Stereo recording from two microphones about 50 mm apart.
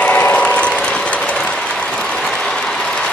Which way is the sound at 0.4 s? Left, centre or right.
Left.